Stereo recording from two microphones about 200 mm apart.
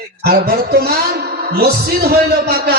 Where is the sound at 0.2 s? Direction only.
50° right (ahead or behind).